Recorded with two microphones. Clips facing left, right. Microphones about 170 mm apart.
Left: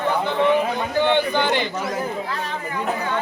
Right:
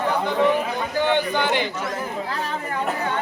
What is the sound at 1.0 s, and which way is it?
Speech, 10° right (ahead or behind).